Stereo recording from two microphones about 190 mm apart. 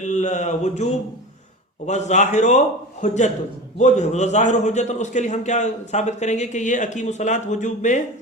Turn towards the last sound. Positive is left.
turn(degrees=40)  # may be behind; listen again after turning